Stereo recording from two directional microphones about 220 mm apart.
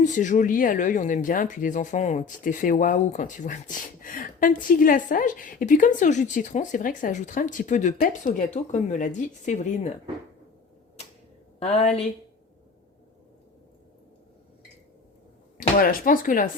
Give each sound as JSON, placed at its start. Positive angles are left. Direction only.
{"t": 0.0, "sound": "speech", "side_deg": 35}
{"t": 11.6, "sound": "speech", "side_deg": 30}
{"t": 15.5, "sound": "speech", "side_deg": 40}